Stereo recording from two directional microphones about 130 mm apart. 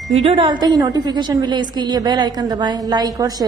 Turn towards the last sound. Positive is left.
turn(degrees=-30)  # may be behind; listen again after turning